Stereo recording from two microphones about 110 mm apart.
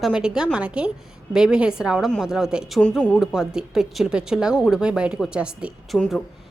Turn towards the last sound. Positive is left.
turn(degrees=-10)  # may be behind; listen again after turning